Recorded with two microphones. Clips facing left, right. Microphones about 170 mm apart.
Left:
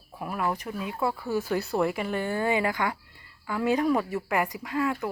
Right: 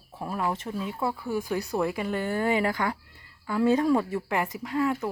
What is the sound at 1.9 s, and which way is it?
A woman's voice, 20° left (ahead or behind).